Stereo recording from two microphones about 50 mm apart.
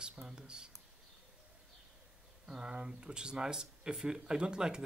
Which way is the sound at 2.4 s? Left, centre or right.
Centre.